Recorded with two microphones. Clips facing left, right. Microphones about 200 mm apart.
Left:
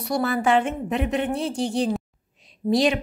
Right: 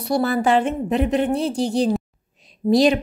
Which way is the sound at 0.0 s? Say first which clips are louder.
Right 3 dB; 35° right (ahead or behind).